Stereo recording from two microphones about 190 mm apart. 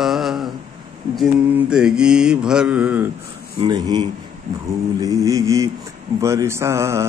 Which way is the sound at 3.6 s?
25° right (ahead or behind).